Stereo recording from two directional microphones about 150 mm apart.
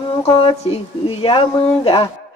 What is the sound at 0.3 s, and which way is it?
Speech, 35° left (ahead or behind).